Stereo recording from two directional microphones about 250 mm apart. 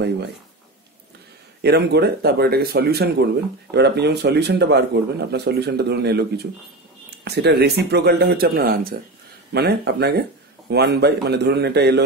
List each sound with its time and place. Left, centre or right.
1.6 s speech: right